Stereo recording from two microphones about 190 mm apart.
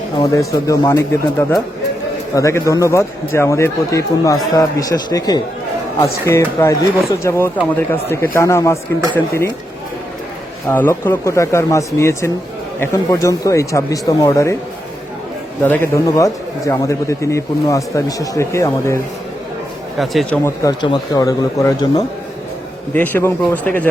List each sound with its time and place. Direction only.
0.2 s a man's voice: 20° left (ahead or behind)
10.7 s a man's voice: 10° left (ahead or behind)
15.6 s a man's voice: 10° left (ahead or behind)
20.0 s speech: centre (ahead or behind)
20.4 s a man's voice: 20° left (ahead or behind)